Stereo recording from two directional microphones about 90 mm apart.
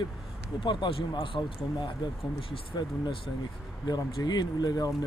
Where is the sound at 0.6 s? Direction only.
60° left (ahead or behind).